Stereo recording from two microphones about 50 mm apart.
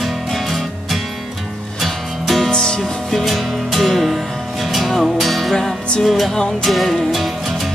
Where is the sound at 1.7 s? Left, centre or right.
Centre.